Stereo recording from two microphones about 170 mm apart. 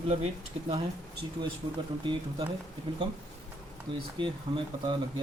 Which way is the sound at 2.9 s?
30° right (ahead or behind).